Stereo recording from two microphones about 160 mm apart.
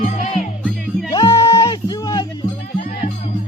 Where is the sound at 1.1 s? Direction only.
25° left (ahead or behind).